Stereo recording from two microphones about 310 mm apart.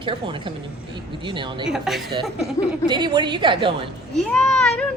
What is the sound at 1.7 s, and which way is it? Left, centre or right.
Speech, centre.